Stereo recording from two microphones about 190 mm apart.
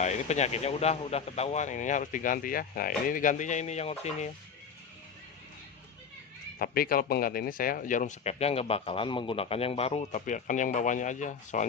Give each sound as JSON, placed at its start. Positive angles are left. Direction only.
{"t": 0.0, "sound": "speech", "side_deg": 35}
{"t": 6.6, "sound": "speech", "side_deg": 50}